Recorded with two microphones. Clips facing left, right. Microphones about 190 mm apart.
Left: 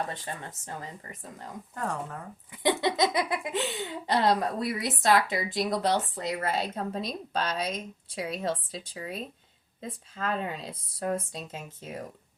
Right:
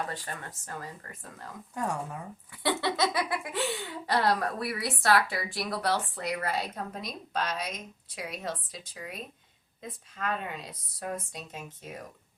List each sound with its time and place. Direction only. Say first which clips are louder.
0.1 s speech: left 1 dB; 20° left (ahead or behind)
1.7 s speech: right 1 dB; 10° right (ahead or behind)
2.5 s speech: left 3 dB; 20° left (ahead or behind)